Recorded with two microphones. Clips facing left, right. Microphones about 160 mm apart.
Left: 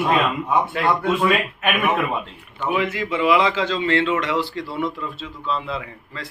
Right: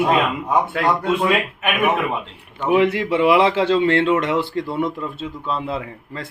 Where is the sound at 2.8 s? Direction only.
65° right (ahead or behind).